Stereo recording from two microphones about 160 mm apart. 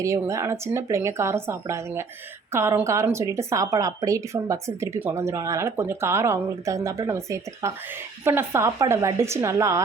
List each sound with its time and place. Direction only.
0.0 s speech: 20° right (ahead or behind)